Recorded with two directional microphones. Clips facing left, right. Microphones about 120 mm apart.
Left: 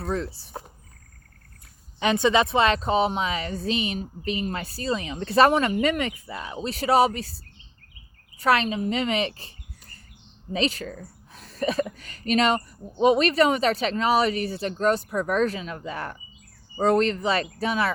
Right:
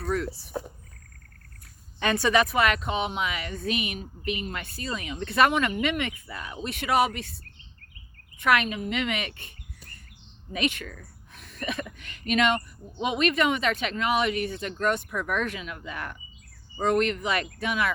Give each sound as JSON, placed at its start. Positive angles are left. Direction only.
{"t": 0.0, "sound": "speech", "side_deg": 25}
{"t": 2.0, "sound": "speech", "side_deg": 20}
{"t": 10.5, "sound": "speech", "side_deg": 30}